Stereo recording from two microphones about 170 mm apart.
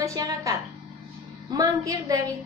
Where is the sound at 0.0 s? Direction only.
20° right (ahead or behind).